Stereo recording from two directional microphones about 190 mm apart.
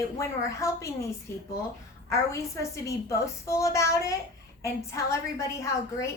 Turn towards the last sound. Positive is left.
turn(degrees=15)  # may be behind; listen again after turning